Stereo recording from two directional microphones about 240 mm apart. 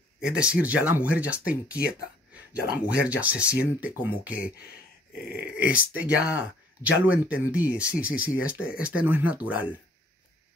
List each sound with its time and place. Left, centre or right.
0.2 s speech: centre
2.9 s speech: centre
5.1 s a sound: left
5.6 s speech: centre